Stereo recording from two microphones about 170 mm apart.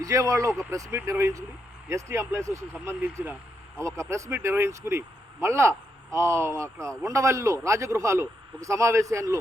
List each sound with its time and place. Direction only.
0.0 s speech: 20° right (ahead or behind)